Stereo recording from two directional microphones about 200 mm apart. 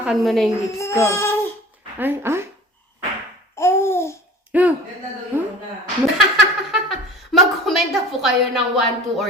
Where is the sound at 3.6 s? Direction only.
15° left (ahead or behind).